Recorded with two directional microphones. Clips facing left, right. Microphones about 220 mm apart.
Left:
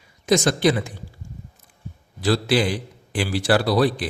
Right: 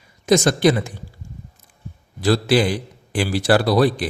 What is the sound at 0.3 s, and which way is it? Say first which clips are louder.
Speech: right 3 dB; 45° right (ahead or behind).